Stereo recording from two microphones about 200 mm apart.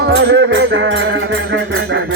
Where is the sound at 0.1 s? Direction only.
55° right (ahead or behind).